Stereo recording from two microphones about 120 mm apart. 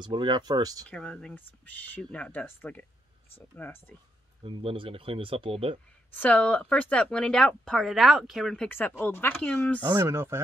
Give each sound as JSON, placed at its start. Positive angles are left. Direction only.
{"t": 0.0, "sound": "speech", "side_deg": -40}
{"t": 0.8, "sound": "speech", "side_deg": 10}
{"t": 4.4, "sound": "speech", "side_deg": -45}
{"t": 6.1, "sound": "speech", "side_deg": 15}
{"t": 8.6, "sound": "speech", "side_deg": 15}
{"t": 9.9, "sound": "speech", "side_deg": -20}